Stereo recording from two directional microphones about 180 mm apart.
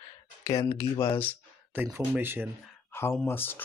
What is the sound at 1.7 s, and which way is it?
Speech, 10° right (ahead or behind).